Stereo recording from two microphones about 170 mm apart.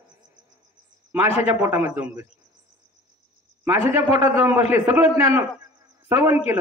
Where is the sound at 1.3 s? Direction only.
40° left (ahead or behind).